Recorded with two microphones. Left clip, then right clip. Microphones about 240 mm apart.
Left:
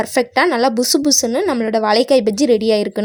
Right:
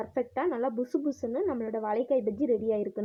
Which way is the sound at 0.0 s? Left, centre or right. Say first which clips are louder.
Left 15 dB; left.